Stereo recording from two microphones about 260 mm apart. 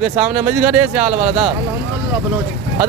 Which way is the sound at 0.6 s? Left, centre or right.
Centre.